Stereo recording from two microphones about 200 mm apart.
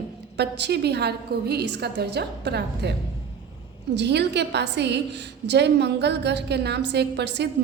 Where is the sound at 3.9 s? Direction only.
60° right (ahead or behind).